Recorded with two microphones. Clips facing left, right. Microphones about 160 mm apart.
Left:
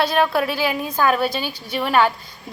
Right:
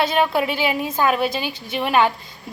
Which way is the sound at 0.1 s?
20° right (ahead or behind).